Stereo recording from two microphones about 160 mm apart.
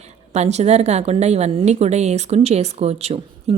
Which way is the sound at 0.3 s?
45° right (ahead or behind).